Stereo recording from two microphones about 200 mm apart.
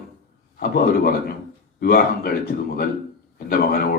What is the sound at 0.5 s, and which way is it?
A man's voice, 45° left (ahead or behind).